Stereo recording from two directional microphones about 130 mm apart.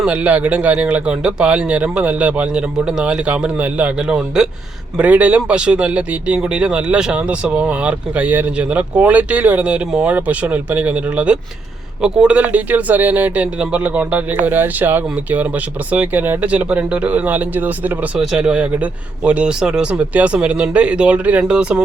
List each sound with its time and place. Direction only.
0.0 s speech: 10° right (ahead or behind)